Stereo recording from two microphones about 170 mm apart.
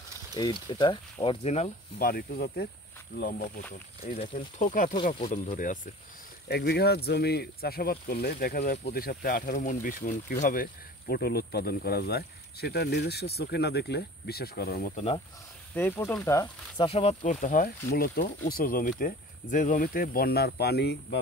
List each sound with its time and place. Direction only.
0.4 s speech: 25° left (ahead or behind)
2.0 s speech: 60° left (ahead or behind)
3.2 s speech: 55° left (ahead or behind)
4.2 s speech: 35° left (ahead or behind)
4.6 s speech: 50° left (ahead or behind)
4.9 s speech: 30° left (ahead or behind)
5.3 s speech: 50° left (ahead or behind)
6.5 s speech: 70° left (ahead or behind)
15.0 s speech: 35° left (ahead or behind)
15.7 s speech: 15° left (ahead or behind)
16.8 s speech: 35° left (ahead or behind); by 21.2 s 75° left (ahead or behind)